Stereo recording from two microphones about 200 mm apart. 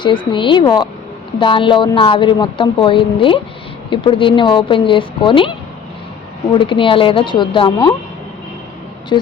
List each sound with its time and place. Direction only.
0.0 s a woman's voice: 25° left (ahead or behind)